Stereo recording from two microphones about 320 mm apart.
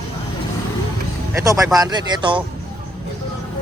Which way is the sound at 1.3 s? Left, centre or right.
Centre.